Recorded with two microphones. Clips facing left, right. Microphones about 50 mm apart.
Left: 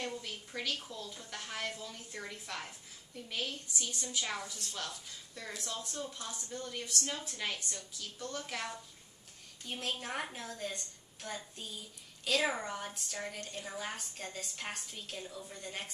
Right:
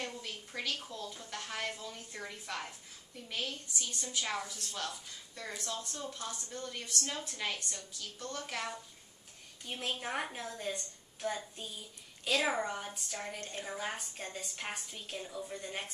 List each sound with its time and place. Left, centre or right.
0.0 s a sound: centre
0.9 s a woman's voice: centre
13.4 s a woman's voice: right
13.8 s a woman's voice: centre